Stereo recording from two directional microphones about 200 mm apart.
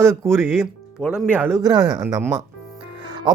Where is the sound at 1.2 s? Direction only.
10° right (ahead or behind).